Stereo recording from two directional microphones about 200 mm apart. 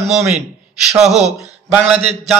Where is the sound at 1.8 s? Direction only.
35° right (ahead or behind).